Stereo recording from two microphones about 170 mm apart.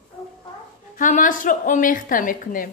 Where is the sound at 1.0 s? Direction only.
50° left (ahead or behind).